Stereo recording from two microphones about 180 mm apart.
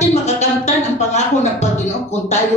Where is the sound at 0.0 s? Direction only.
40° left (ahead or behind).